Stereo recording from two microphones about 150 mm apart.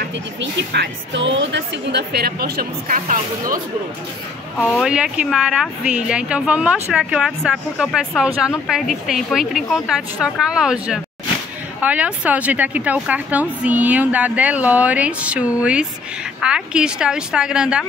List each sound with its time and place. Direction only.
1.9 s a woman's voice: 90° right; by 3.5 s 65° right (ahead or behind)
4.8 s a woman's voice: 5° right (ahead or behind)